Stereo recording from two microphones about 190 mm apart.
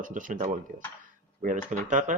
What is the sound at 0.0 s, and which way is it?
Speech, 45° right (ahead or behind).